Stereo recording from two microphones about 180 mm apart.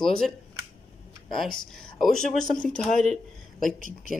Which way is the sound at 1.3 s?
5° left (ahead or behind).